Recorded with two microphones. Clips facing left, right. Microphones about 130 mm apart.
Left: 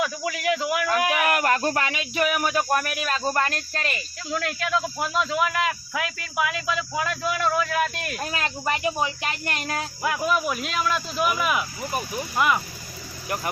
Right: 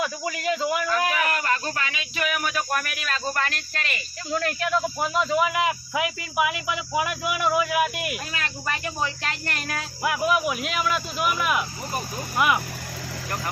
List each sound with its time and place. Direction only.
0.6 s speech: 5° left (ahead or behind)
1.2 s speech: 65° left (ahead or behind); by 2.3 s 45° left (ahead or behind)
2.3 s speech: 30° left (ahead or behind)
4.3 s speech: centre (ahead or behind)
5.5 s speech: 20° right (ahead or behind)
8.3 s speech: 30° left (ahead or behind)
10.0 s speech: 5° right (ahead or behind)